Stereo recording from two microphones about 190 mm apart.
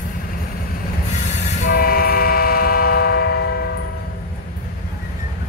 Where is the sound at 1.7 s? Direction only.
50° left (ahead or behind).